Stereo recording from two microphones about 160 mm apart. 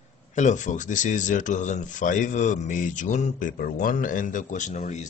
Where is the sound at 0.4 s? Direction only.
50° left (ahead or behind).